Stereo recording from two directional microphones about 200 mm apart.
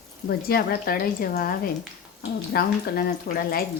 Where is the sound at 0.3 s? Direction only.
50° left (ahead or behind).